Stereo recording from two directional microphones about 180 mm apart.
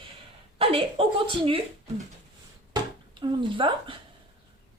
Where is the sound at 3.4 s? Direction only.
30° right (ahead or behind).